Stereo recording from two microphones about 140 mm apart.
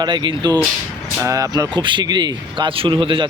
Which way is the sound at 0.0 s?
35° right (ahead or behind).